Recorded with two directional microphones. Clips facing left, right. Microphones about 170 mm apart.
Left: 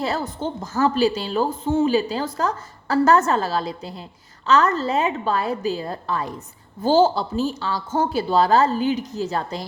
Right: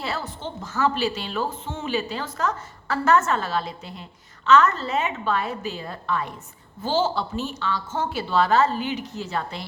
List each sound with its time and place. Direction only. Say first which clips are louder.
0.0 s speech: left 6 dB; 40° left (ahead or behind)